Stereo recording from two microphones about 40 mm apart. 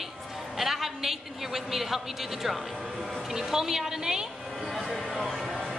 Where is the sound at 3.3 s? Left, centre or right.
Centre.